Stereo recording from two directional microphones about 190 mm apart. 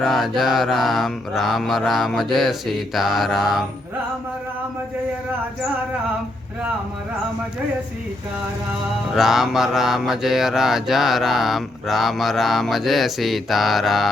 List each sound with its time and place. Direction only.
0.0 s mantra: centre (ahead or behind)
9.1 s mantra: centre (ahead or behind)